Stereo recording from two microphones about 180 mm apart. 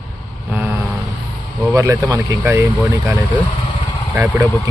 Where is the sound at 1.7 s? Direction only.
20° right (ahead or behind).